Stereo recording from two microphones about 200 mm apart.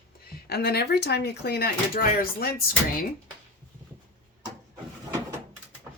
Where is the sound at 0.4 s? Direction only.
50° left (ahead or behind).